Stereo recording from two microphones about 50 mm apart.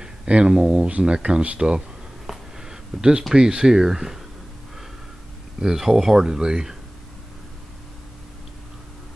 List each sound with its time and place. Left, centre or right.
0.0 s speech: centre
2.2 s a sound: centre
3.3 s speech: centre
5.6 s speech: centre